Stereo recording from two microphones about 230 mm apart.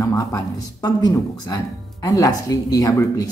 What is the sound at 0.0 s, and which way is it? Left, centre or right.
A woman's voice, centre.